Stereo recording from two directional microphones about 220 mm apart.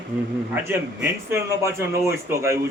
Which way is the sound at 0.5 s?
10° right (ahead or behind).